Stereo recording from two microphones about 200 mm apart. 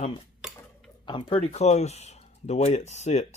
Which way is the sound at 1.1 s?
20° left (ahead or behind).